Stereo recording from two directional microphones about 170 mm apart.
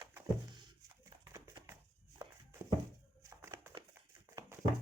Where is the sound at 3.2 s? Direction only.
20° right (ahead or behind).